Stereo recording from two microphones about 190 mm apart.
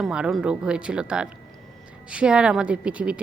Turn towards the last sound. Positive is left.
turn(degrees=-5)  # may be behind; listen again after turning